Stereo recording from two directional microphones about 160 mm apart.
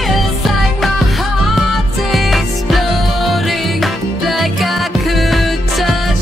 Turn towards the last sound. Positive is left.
turn(degrees=0)  # may be behind; listen again after turning